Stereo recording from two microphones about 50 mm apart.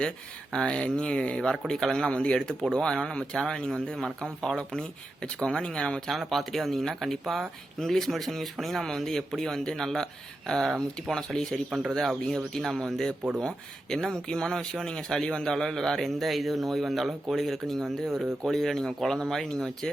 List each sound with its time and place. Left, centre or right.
0.5 s speech: centre
6.1 s speech: centre
11.7 s speech: centre